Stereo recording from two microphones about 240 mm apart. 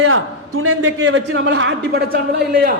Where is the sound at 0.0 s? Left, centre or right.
Right.